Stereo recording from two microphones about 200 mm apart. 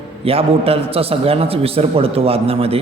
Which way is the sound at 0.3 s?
30° right (ahead or behind).